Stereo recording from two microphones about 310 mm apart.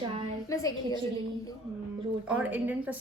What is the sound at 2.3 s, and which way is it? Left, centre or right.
Speech, centre.